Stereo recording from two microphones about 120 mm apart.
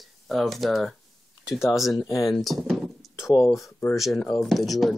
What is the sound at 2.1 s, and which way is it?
Speech, 30° left (ahead or behind).